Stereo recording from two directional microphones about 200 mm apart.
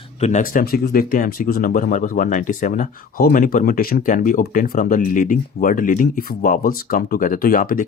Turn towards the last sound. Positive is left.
turn(degrees=45)  # may be behind; listen again after turning